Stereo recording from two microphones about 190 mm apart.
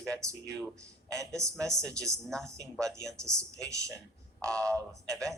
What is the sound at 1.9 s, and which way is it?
Speech, 15° right (ahead or behind).